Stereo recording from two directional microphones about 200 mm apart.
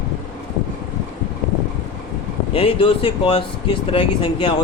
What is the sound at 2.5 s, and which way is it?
Speech, 30° left (ahead or behind).